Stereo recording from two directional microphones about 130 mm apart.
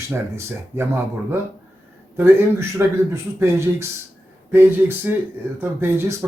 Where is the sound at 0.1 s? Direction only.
20° right (ahead or behind).